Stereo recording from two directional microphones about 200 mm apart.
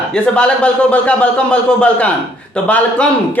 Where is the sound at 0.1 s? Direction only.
5° left (ahead or behind).